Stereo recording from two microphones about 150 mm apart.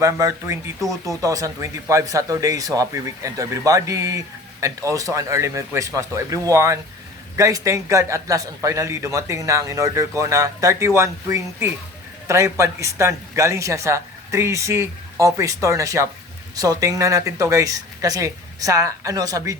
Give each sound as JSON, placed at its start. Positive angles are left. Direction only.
{"t": 0.0, "sound": "a man's voice", "side_deg": -20}